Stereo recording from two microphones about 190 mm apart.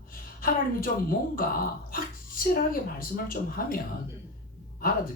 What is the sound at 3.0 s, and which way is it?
Speech, 50° left (ahead or behind).